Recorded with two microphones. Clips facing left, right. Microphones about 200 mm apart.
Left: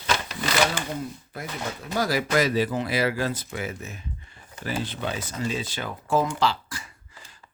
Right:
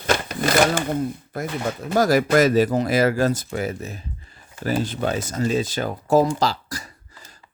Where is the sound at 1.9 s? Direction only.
45° right (ahead or behind).